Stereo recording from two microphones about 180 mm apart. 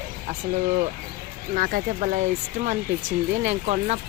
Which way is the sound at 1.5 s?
50° right (ahead or behind).